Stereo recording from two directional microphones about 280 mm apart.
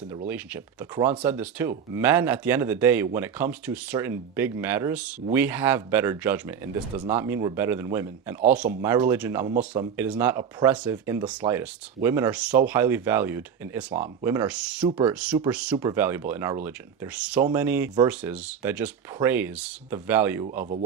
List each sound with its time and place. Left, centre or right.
0.3 s speech: centre
14.8 s speech: centre
15.1 s speech: centre